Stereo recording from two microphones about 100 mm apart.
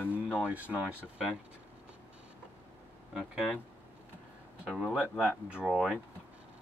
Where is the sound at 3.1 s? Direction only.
Centre (ahead or behind).